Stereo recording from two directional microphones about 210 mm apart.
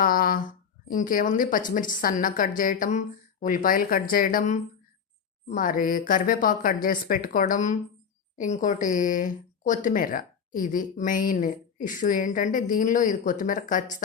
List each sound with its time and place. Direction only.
0.0 s speech: 45° left (ahead or behind)